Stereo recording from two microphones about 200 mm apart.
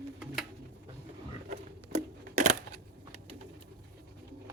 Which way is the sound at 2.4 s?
35° right (ahead or behind).